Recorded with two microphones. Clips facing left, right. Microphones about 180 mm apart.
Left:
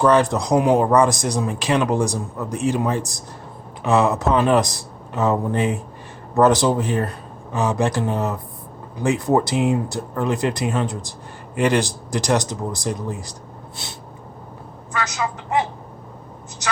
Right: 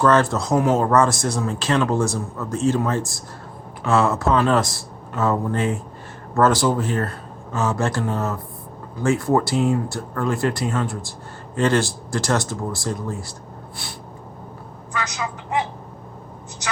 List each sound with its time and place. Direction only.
0.0 s speech: 15° left (ahead or behind)